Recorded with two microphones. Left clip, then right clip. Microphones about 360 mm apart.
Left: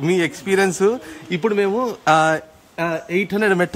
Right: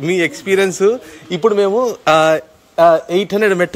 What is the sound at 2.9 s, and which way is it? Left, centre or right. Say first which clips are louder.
Speech: right 8 dB; right.